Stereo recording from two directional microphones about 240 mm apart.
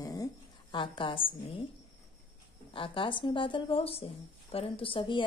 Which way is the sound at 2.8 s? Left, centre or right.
Left.